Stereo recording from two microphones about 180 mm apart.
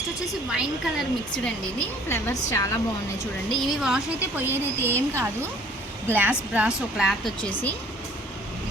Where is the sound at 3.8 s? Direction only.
5° right (ahead or behind).